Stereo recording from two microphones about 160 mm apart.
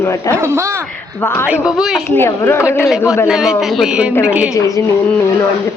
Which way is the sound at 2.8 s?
5° right (ahead or behind).